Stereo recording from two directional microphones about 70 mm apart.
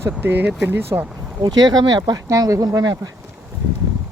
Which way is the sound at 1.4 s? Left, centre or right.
Right.